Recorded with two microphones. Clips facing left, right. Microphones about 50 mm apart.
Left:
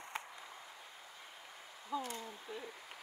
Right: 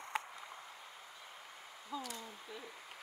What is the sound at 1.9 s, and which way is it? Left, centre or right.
Speech, left.